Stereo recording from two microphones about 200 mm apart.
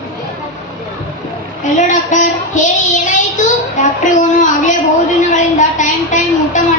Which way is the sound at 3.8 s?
40° left (ahead or behind).